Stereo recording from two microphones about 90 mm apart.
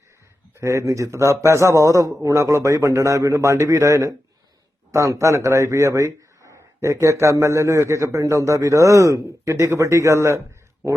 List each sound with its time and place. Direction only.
0.6 s speech: 35° right (ahead or behind)